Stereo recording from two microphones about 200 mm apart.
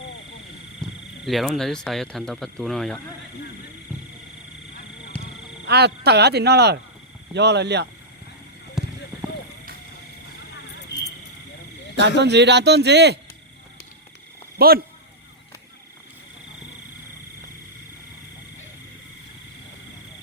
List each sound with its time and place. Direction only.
0.8 s a sound: centre (ahead or behind)
1.2 s speech: centre (ahead or behind)
5.6 s speech: 55° right (ahead or behind)
8.8 s a sound: centre (ahead or behind)
11.9 s speech: 60° right (ahead or behind)
14.6 s speech: 50° right (ahead or behind)